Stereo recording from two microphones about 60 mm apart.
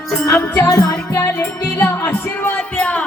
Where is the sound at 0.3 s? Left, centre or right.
Left.